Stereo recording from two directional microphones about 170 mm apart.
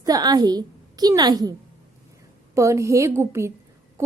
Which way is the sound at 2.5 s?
15° right (ahead or behind).